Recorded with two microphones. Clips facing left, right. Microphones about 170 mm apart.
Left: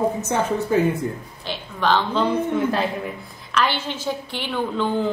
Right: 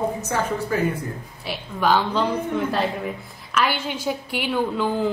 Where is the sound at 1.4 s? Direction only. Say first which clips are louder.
Right 1 dB; 10° right (ahead or behind).